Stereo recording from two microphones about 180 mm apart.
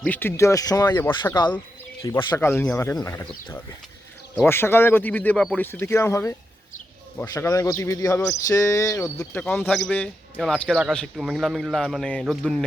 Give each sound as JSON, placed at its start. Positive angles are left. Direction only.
{"t": 0.0, "sound": "speech", "side_deg": 10}
{"t": 4.4, "sound": "speech", "side_deg": 15}